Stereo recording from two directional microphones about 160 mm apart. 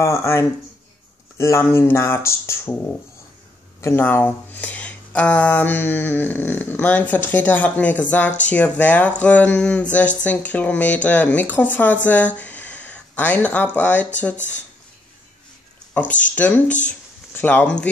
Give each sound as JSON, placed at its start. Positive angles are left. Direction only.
{"t": 0.0, "sound": "speech", "side_deg": 20}
{"t": 3.8, "sound": "speech", "side_deg": 15}
{"t": 15.9, "sound": "speech", "side_deg": 10}